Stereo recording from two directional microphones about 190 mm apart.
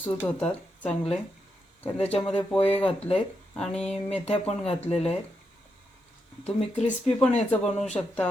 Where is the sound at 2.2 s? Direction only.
5° left (ahead or behind).